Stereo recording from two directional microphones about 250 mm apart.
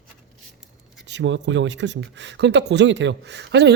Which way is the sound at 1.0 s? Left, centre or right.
Right.